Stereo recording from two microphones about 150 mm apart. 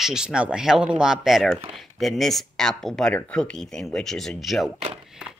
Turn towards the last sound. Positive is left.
turn(degrees=0)  # may be behind; listen again after turning